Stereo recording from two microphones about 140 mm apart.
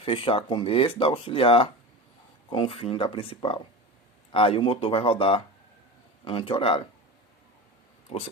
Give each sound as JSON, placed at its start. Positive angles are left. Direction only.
{"t": 0.0, "sound": "speech", "side_deg": 40}
{"t": 8.1, "sound": "speech", "side_deg": 40}